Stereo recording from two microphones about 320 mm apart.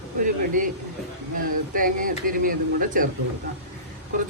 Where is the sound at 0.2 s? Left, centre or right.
Right.